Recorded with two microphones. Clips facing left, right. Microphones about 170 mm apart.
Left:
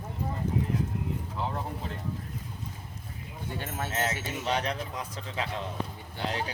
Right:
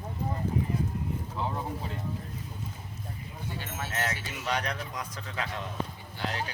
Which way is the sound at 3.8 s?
25° left (ahead or behind).